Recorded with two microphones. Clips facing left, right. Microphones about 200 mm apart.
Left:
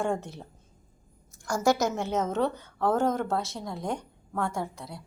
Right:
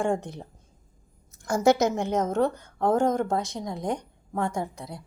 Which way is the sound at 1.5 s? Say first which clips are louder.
Right 4 dB; 20° right (ahead or behind).